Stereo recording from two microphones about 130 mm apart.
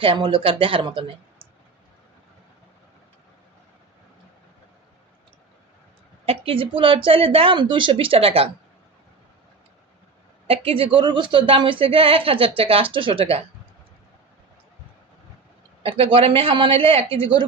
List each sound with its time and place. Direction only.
0.0 s a woman's voice: 40° right (ahead or behind)
6.2 s a woman's voice: 45° right (ahead or behind)
10.4 s a woman's voice: 45° right (ahead or behind)
15.8 s a woman's voice: 45° right (ahead or behind)